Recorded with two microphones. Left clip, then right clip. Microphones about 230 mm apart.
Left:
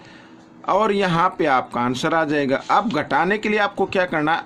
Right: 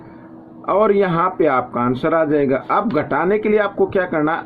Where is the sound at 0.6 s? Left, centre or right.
Left.